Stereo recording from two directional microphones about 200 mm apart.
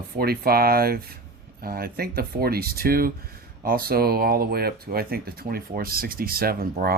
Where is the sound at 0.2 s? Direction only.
50° right (ahead or behind).